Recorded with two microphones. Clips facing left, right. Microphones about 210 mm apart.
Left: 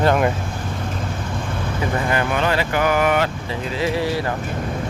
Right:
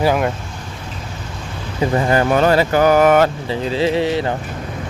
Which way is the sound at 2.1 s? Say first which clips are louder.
Right 7 dB; 35° right (ahead or behind).